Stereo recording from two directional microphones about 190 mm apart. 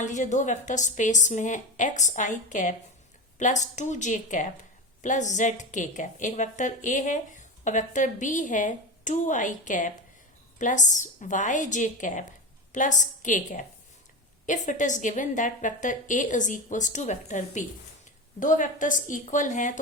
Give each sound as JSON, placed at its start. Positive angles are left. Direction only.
{"t": 0.0, "sound": "a woman's voice", "side_deg": 40}